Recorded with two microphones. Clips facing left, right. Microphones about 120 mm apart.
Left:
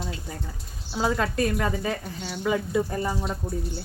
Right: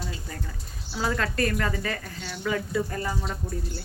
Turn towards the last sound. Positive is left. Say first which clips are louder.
# left 3 dB
turn(degrees=15)  # may be behind; listen again after turning